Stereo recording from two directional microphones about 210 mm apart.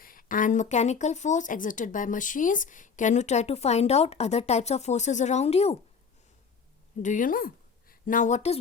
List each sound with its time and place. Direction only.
0.0 s speech: 40° left (ahead or behind)
7.0 s a woman's voice: 40° left (ahead or behind)